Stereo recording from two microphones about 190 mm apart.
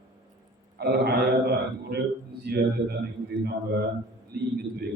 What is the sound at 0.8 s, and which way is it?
A man's voice, 55° right (ahead or behind).